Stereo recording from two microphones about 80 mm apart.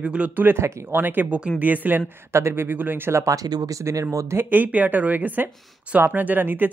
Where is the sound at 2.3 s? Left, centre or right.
Right.